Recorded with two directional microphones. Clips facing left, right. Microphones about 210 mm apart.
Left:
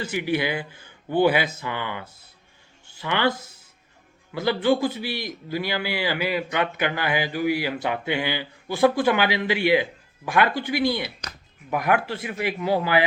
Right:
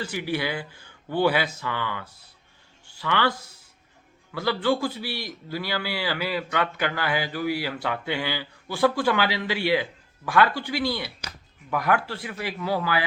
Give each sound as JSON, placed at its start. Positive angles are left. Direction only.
{"t": 0.0, "sound": "a man's voice", "side_deg": 20}